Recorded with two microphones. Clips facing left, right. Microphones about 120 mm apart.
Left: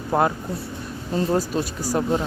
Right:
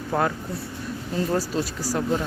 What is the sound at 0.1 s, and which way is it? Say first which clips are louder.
Speech: left 3 dB; 25° left (ahead or behind).